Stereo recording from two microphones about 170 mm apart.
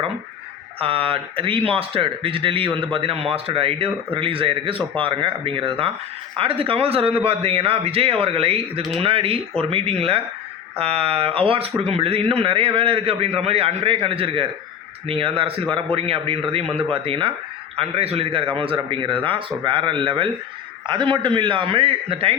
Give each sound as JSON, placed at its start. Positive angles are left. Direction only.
{"t": 0.8, "sound": "a man's voice", "side_deg": -35}